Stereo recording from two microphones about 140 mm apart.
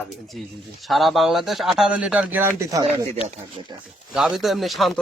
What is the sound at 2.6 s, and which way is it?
Speech, 25° right (ahead or behind).